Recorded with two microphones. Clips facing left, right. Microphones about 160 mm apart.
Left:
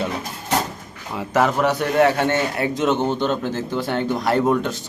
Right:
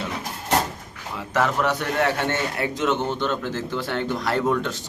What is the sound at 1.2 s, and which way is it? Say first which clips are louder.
Speech: left 4 dB; 10° left (ahead or behind).